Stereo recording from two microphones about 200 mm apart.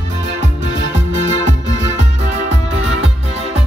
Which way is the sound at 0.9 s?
35° right (ahead or behind).